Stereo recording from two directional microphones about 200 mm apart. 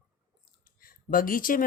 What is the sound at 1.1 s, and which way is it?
Speech, 45° left (ahead or behind).